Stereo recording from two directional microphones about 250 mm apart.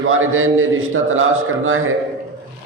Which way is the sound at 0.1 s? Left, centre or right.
Right.